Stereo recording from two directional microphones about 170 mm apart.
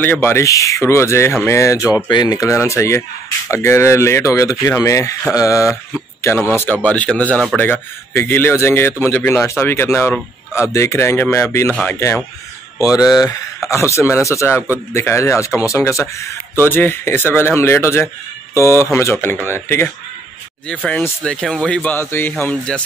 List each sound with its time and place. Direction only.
0.0 s speech: 10° left (ahead or behind)